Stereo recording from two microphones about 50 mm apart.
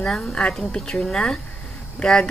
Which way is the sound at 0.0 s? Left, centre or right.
Centre.